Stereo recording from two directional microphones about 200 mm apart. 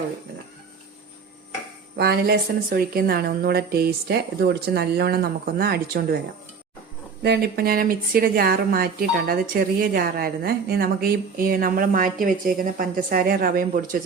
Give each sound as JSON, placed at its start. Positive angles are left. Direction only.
{"t": 2.0, "sound": "speech", "side_deg": -50}
{"t": 7.2, "sound": "speech", "side_deg": -50}